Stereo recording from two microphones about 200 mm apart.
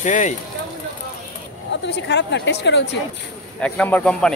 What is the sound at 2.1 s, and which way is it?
Speech, 60° left (ahead or behind).